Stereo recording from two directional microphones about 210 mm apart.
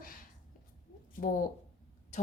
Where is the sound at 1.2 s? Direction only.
40° left (ahead or behind).